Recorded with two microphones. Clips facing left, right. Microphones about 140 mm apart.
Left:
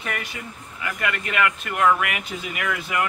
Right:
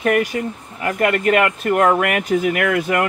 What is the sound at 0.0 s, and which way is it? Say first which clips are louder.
Speech: right 14 dB; 50° right (ahead or behind).